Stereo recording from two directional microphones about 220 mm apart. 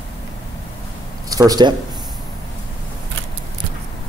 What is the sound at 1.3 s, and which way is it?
Speech, 15° right (ahead or behind).